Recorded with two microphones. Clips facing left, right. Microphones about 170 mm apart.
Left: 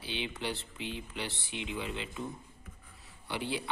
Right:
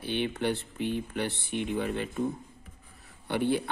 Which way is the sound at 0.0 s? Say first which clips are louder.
Right 8 dB; 55° right (ahead or behind).